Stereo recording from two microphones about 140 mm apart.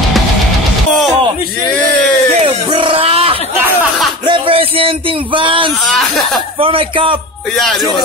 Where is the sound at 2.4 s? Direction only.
40° right (ahead or behind).